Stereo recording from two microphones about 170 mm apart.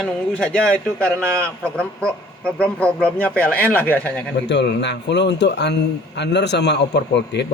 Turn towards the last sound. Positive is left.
turn(degrees=90)